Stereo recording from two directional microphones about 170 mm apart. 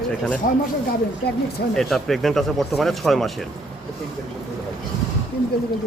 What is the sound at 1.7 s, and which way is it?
Speech, centre (ahead or behind).